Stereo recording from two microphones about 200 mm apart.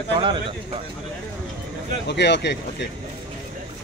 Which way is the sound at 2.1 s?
60° left (ahead or behind).